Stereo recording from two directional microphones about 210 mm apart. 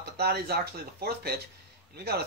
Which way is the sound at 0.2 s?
50° right (ahead or behind).